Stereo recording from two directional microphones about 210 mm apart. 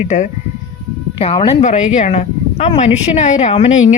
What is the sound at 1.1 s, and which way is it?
Speech, 25° left (ahead or behind).